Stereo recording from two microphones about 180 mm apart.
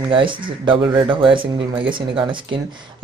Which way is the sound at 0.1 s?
25° right (ahead or behind).